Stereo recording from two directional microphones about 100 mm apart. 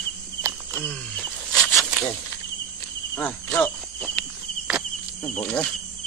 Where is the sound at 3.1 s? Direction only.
15° left (ahead or behind).